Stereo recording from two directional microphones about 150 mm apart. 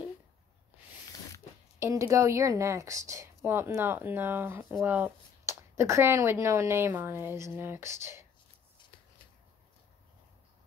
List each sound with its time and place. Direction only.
1.8 s speech: 20° right (ahead or behind)